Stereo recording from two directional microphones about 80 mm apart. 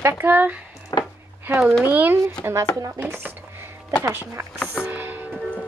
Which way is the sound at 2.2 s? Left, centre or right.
Right.